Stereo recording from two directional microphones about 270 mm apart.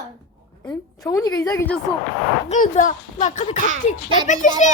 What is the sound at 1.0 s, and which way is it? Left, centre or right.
Speech, centre.